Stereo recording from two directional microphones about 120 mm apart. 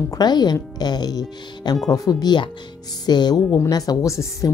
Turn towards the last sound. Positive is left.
turn(degrees=25)  # may be behind; listen again after turning